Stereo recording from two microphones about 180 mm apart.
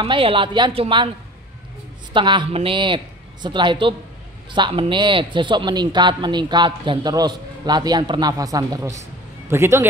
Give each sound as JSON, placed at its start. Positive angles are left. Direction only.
{"t": 0.0, "sound": "a man's voice", "side_deg": -30}
{"t": 2.1, "sound": "a man's voice", "side_deg": -25}